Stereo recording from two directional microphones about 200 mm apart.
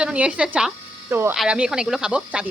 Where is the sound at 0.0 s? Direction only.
5° right (ahead or behind).